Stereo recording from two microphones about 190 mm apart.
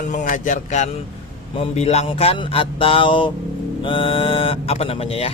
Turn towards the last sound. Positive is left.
turn(degrees=30)  # may be behind; listen again after turning